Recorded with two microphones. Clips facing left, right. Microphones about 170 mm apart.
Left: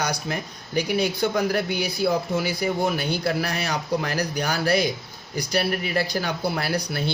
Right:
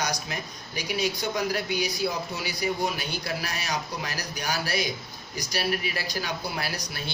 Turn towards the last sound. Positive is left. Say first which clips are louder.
# left 7 dB
turn(degrees=60)  # may be behind; listen again after turning